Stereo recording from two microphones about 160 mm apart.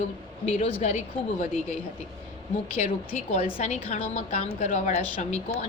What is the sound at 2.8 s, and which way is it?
A woman's voice, 45° left (ahead or behind).